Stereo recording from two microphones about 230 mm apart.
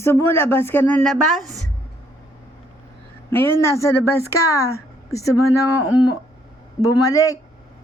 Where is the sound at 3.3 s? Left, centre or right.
Centre.